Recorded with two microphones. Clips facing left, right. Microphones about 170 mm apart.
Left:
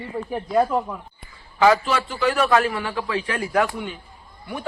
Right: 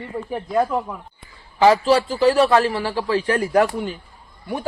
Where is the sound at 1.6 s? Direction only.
30° right (ahead or behind).